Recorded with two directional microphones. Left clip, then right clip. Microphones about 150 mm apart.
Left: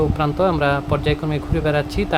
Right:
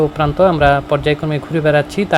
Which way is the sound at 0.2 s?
15° right (ahead or behind).